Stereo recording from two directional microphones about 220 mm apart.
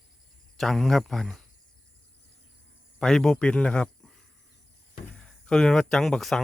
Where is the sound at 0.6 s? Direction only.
Centre (ahead or behind).